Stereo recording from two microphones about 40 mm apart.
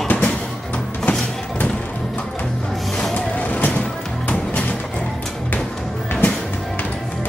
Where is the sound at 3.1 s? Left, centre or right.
Left.